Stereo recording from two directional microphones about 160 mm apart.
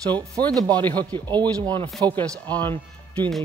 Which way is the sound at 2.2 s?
10° left (ahead or behind).